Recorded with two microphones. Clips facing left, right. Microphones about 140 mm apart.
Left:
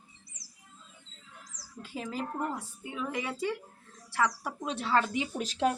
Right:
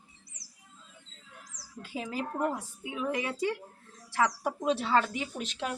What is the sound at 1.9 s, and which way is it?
Speech, 10° right (ahead or behind).